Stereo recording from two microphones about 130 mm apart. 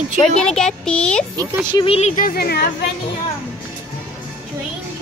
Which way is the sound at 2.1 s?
90° left.